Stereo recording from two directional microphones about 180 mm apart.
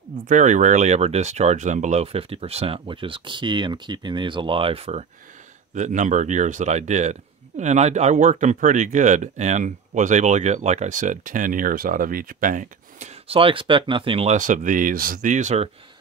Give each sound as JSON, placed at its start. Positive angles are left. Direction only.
{"t": 0.3, "sound": "speech", "side_deg": -40}
{"t": 13.3, "sound": "speech", "side_deg": -30}